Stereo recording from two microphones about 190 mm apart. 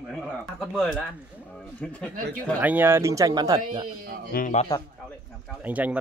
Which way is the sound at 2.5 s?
10° right (ahead or behind).